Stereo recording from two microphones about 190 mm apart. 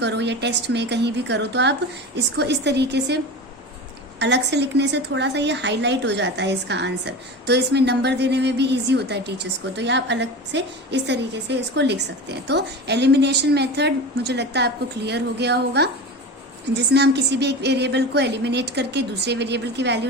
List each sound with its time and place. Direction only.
0.0 s a woman's voice: 65° right (ahead or behind)
4.2 s a woman's voice: 65° right (ahead or behind)